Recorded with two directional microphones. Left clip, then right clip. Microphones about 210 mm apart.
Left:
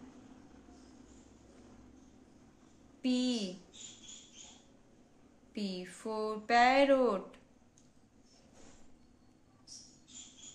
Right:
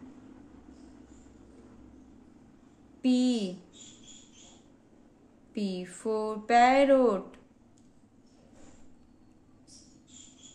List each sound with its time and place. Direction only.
3.0 s speech: 15° right (ahead or behind)
5.5 s speech: 15° right (ahead or behind)